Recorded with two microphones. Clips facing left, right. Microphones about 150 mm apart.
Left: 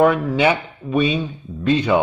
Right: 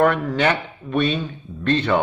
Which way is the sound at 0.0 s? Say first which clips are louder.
Left 3 dB; 10° left (ahead or behind).